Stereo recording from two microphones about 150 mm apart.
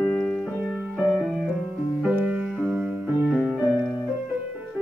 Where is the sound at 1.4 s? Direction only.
Centre (ahead or behind).